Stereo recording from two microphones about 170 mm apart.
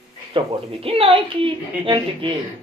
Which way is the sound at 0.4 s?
30° right (ahead or behind).